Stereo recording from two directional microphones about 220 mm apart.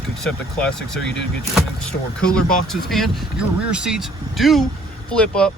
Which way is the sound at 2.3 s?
Centre (ahead or behind).